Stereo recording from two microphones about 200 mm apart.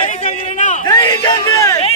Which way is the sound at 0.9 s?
20° left (ahead or behind).